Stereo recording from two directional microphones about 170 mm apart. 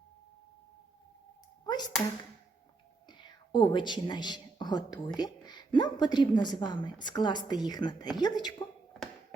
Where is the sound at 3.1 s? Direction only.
25° left (ahead or behind).